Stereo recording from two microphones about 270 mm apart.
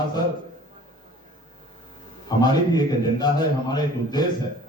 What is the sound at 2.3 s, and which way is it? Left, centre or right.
A man's voice, centre.